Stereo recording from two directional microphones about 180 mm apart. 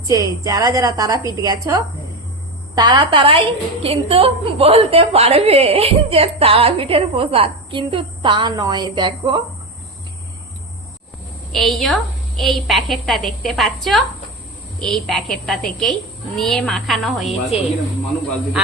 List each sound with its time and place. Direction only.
0.1 s a woman's voice: 20° right (ahead or behind)
11.5 s a child's voice: centre (ahead or behind)